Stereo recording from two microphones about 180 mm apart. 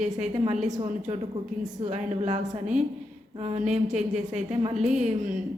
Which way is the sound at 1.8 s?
35° right (ahead or behind).